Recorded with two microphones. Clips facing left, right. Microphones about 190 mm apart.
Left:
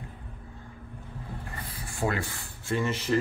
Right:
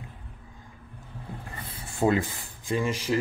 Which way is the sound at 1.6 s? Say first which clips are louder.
Right 5 dB; 25° right (ahead or behind).